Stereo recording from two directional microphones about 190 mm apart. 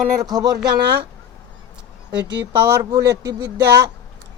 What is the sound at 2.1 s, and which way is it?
Speech, 65° right (ahead or behind).